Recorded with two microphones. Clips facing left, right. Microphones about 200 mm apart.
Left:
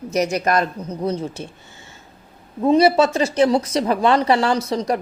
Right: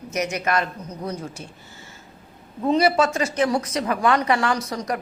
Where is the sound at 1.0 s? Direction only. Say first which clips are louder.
Left 7 dB; 25° left (ahead or behind).